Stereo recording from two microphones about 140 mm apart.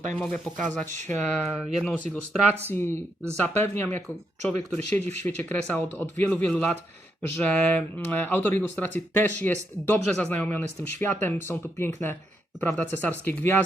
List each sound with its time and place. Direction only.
0.2 s speech: 10° left (ahead or behind)
2.6 s speech: 15° left (ahead or behind)